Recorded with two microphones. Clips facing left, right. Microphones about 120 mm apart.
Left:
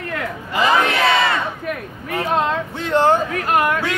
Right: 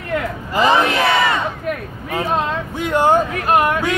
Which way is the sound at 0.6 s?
25° right (ahead or behind).